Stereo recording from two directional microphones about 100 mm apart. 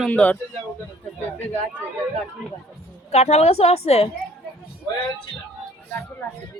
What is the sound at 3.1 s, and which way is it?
Speech, 90° left.